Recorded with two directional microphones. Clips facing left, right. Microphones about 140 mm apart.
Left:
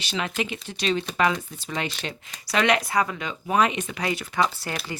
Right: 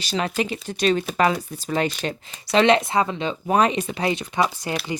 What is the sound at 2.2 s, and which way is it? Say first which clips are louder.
Speech: right 6 dB; 30° right (ahead or behind).